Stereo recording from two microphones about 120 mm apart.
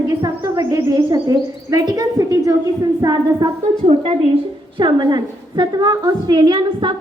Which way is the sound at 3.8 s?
60° right (ahead or behind).